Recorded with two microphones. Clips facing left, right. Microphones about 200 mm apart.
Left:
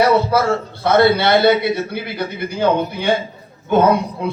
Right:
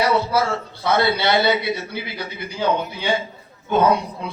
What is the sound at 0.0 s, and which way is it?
A man's voice, 55° left (ahead or behind).